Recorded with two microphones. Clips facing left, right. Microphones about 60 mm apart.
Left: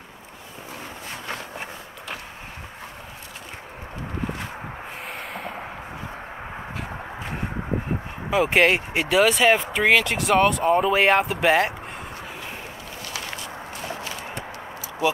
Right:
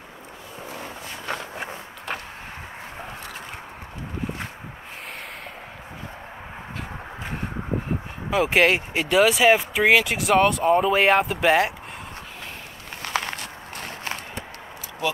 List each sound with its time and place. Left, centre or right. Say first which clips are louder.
8.3 s speech: even; centre
13.0 s walk: right 6 dB; right